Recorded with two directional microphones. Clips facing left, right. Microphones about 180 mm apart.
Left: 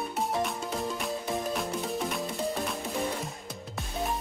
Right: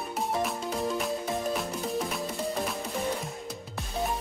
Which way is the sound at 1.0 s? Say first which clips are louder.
Right 2 dB; centre (ahead or behind).